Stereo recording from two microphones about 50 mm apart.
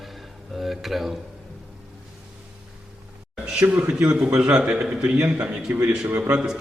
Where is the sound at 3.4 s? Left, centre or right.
Centre.